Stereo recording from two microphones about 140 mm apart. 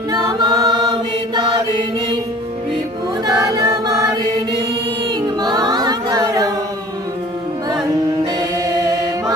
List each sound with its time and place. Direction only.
0.1 s choir: 25° right (ahead or behind)
3.2 s music: 25° right (ahead or behind)
5.4 s a capella: 30° right (ahead or behind)
8.4 s chant: 25° right (ahead or behind)